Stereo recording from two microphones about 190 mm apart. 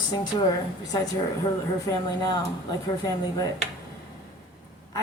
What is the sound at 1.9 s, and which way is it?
Speech, 20° left (ahead or behind).